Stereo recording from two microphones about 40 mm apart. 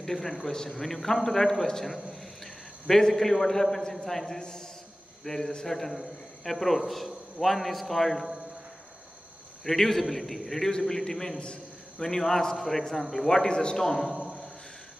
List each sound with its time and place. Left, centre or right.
0.0 s a man's voice: centre
5.7 s a man's voice: centre
9.7 s a man's voice: centre
11.3 s a sound: left
12.1 s a man's voice: centre
13.5 s a man's voice: centre
13.8 s a man's voice: centre